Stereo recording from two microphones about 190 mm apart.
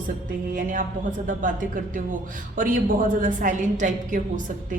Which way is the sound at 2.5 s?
45° right (ahead or behind).